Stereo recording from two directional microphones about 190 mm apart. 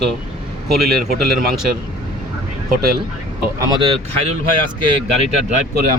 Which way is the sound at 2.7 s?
50° right (ahead or behind).